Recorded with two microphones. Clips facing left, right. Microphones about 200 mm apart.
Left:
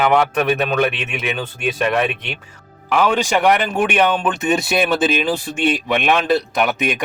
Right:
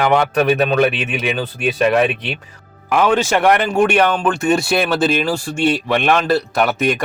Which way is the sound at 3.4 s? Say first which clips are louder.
Right 4 dB; centre (ahead or behind).